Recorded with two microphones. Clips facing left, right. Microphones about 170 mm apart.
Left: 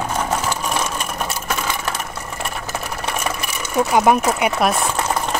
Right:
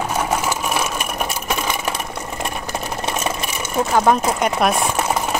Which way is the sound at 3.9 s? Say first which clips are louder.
Left 1 dB; 10° left (ahead or behind).